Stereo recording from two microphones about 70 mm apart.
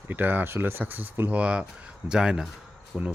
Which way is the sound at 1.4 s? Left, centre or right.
Centre.